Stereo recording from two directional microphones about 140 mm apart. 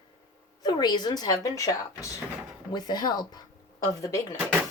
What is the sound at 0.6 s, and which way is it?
Speech, 30° left (ahead or behind).